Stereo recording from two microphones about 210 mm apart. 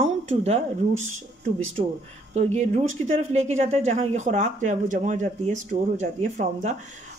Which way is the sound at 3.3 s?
30° right (ahead or behind).